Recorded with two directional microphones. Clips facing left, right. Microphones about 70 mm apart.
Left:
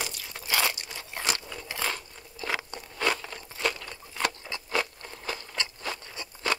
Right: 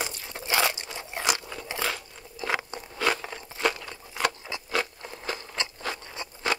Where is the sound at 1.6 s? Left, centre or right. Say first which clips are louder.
Right 2 dB; right.